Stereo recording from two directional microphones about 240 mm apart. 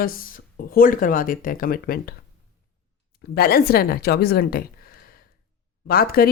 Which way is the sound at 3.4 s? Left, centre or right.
Left.